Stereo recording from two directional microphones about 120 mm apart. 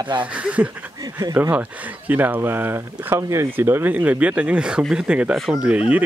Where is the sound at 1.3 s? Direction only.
15° right (ahead or behind).